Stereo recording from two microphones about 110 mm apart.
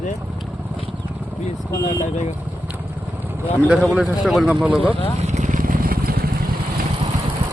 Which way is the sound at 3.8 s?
Centre (ahead or behind).